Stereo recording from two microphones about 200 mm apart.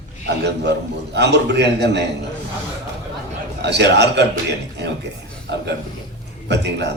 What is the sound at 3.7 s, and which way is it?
A man's voice, 60° right (ahead or behind).